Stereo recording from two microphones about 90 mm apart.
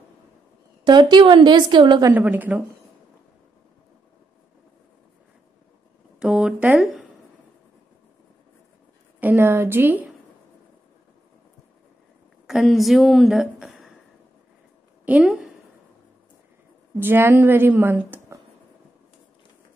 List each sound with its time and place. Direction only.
0.8 s a woman's voice: 60° right (ahead or behind)
2.1 s a woman's voice: 20° right (ahead or behind)
6.1 s a sound: 5° right (ahead or behind)
9.2 s a woman's voice: 25° right (ahead or behind)
12.4 s a woman's voice: 5° right (ahead or behind)
15.2 s a woman's voice: 5° right (ahead or behind)
17.0 s a woman's voice: 25° right (ahead or behind)